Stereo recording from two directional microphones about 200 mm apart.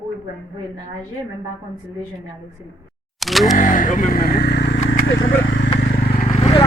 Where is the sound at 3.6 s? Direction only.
40° left (ahead or behind).